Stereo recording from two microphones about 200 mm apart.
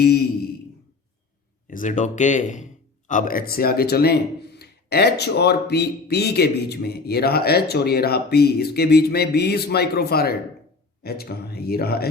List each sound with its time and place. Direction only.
1.7 s speech: 40° left (ahead or behind)